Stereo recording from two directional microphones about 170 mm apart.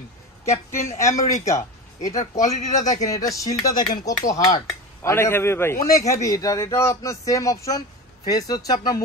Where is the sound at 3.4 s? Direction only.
20° left (ahead or behind).